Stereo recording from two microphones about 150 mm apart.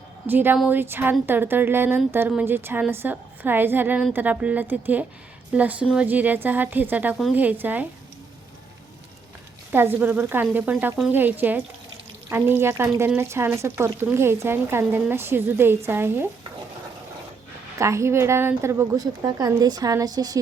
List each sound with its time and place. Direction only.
0.3 s speech: 15° right (ahead or behind)
9.7 s speech: 15° right (ahead or behind)
17.7 s a woman's voice: 20° right (ahead or behind)